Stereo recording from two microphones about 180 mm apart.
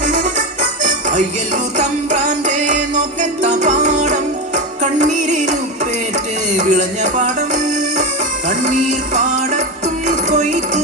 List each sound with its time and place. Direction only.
0.0 s music: 45° right (ahead or behind)